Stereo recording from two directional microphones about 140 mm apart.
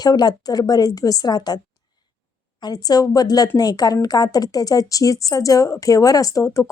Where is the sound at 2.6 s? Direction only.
30° left (ahead or behind).